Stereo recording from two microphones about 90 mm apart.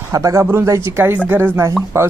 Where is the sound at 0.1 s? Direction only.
35° right (ahead or behind).